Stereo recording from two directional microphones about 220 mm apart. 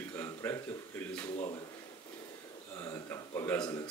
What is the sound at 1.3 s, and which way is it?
Speech, 25° left (ahead or behind).